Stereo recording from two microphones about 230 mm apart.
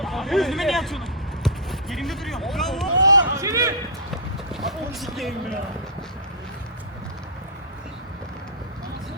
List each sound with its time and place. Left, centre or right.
0.0 s speech: centre
1.5 s basketball bounce: centre
3.0 s run: centre
3.3 s speech: centre
4.9 s speech: centre